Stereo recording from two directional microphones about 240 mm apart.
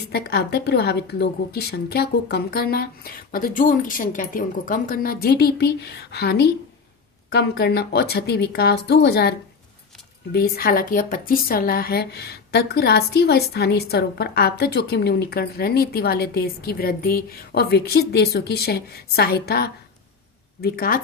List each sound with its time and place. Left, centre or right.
0.1 s a woman's voice: left
10.3 s a woman's voice: left